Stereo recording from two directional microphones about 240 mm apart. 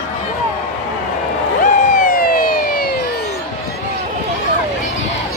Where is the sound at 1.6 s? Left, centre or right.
Left.